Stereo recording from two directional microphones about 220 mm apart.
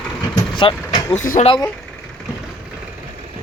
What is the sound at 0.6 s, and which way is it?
Vehicle, 25° left (ahead or behind).